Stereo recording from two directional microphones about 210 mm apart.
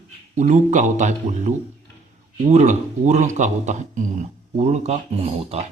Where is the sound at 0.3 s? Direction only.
35° right (ahead or behind).